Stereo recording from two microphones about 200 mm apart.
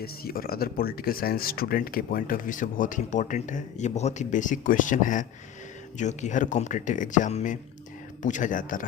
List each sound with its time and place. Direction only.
0.0 s speech: 50° left (ahead or behind)